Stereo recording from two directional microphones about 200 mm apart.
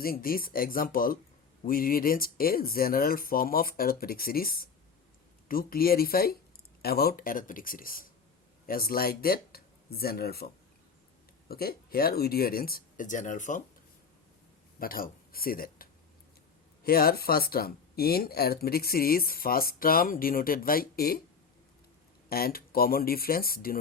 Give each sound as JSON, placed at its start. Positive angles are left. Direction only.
{"t": 0.0, "sound": "speech", "side_deg": 45}
{"t": 14.8, "sound": "speech", "side_deg": 45}
{"t": 22.3, "sound": "speech", "side_deg": 50}